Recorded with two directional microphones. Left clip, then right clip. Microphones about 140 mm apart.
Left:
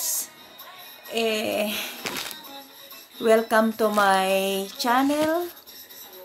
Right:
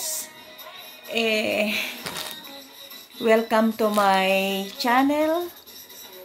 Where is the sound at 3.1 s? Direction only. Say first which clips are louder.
Even; 15° right (ahead or behind).